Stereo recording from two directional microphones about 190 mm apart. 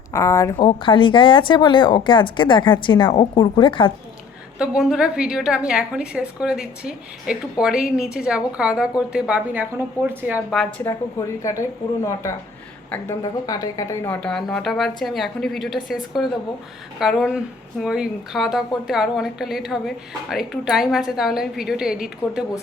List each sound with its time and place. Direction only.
0.1 s speech: 15° left (ahead or behind)
4.5 s a woman's voice: 5° right (ahead or behind)
11.4 s a woman's voice: 15° left (ahead or behind); by 22.0 s 5° right (ahead or behind)
22.2 s speech: 20° left (ahead or behind)